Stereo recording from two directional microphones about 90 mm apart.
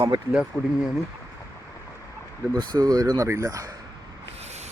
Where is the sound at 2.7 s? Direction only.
45° right (ahead or behind).